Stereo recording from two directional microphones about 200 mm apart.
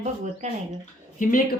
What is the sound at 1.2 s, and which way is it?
Speech, 45° left (ahead or behind).